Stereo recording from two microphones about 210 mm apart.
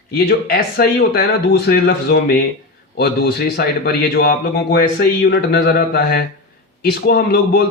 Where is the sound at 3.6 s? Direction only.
45° left (ahead or behind).